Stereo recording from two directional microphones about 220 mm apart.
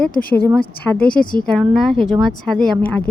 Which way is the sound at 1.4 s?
Centre (ahead or behind).